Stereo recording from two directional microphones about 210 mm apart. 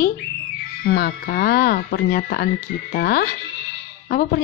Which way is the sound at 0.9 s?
45° left (ahead or behind).